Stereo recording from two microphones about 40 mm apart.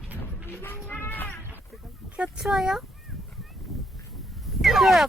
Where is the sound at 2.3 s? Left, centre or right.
Centre.